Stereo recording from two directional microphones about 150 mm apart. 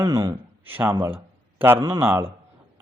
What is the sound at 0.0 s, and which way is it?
A man's voice, 20° right (ahead or behind).